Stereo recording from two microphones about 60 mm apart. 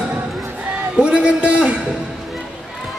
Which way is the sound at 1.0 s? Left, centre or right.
Centre.